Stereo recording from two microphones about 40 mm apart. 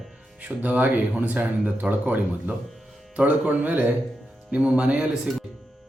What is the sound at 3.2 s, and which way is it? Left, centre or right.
Speech, right.